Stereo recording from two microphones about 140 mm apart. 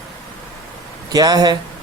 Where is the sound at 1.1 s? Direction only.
25° right (ahead or behind).